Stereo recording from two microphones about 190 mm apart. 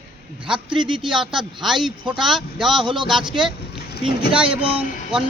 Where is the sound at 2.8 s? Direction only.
25° right (ahead or behind).